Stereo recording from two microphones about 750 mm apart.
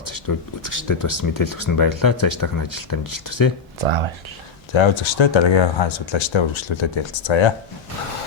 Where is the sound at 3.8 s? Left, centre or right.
Right.